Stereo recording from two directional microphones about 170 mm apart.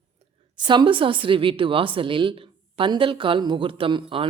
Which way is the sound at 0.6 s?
25° right (ahead or behind).